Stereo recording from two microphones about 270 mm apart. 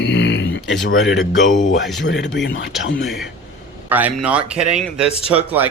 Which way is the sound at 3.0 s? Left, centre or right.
Centre.